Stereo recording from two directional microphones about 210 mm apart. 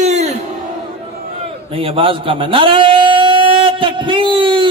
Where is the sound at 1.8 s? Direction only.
25° right (ahead or behind).